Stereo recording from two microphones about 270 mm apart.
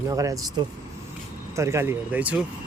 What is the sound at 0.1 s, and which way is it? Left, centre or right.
Speech, centre.